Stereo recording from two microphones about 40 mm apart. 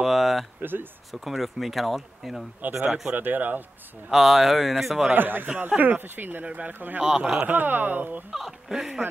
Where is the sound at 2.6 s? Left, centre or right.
Right.